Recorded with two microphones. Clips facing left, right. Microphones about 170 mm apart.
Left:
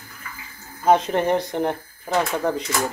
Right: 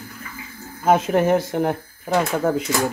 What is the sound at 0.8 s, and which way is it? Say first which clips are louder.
Speech: right 1 dB; 5° right (ahead or behind).